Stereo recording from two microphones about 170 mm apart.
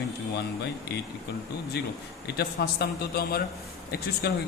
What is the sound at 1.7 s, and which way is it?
A man's voice, 75° left (ahead or behind).